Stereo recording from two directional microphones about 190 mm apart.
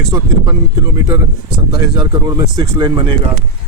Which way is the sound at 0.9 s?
15° right (ahead or behind).